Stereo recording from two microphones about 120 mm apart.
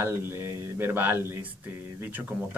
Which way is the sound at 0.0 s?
20° right (ahead or behind).